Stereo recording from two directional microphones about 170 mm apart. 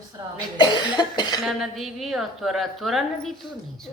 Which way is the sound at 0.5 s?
25° left (ahead or behind).